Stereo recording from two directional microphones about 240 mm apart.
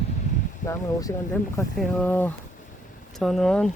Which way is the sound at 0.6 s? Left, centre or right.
Left.